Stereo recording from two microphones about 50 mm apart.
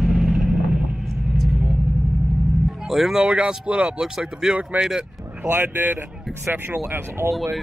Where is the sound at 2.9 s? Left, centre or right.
Centre.